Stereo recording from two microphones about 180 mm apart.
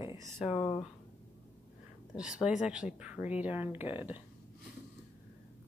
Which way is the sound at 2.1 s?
5° right (ahead or behind).